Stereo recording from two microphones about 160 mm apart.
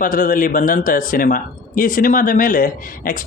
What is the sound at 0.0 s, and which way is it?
A man's voice, 60° left (ahead or behind).